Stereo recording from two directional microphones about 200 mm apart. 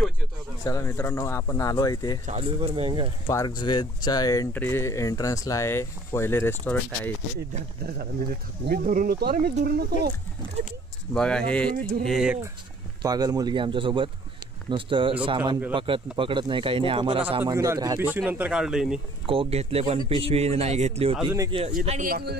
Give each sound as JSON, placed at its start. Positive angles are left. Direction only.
{"t": 0.7, "sound": "speech", "side_deg": 15}
{"t": 2.2, "sound": "speech", "side_deg": -30}
{"t": 3.3, "sound": "speech", "side_deg": 20}
{"t": 8.6, "sound": "speech", "side_deg": -45}
{"t": 11.1, "sound": "speech", "side_deg": 5}
{"t": 13.0, "sound": "speech", "side_deg": -20}
{"t": 17.4, "sound": "speech", "side_deg": -15}
{"t": 19.2, "sound": "speech", "side_deg": -30}
{"t": 22.1, "sound": "speech", "side_deg": -50}